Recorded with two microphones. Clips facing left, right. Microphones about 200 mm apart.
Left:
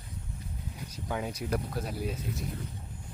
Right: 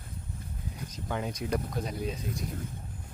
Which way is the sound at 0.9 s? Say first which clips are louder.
Even; 5° left (ahead or behind).